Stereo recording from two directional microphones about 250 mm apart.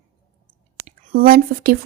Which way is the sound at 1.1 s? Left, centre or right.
Right.